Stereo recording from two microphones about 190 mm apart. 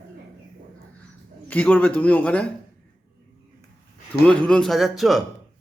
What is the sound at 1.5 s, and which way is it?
A man's voice, 10° left (ahead or behind).